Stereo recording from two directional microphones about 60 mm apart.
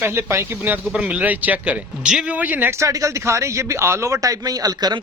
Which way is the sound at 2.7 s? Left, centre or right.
Right.